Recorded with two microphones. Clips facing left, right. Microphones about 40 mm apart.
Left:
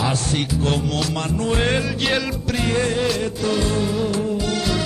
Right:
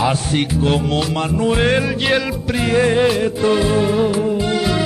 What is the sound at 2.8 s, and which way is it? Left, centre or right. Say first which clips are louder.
Music: right 9 dB; right.